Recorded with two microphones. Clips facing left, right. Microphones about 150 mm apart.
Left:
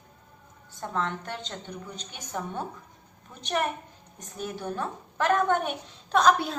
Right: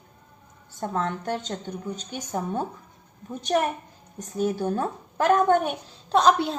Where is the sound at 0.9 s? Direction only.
45° right (ahead or behind).